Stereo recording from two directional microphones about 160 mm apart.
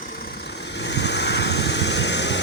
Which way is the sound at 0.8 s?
90° left.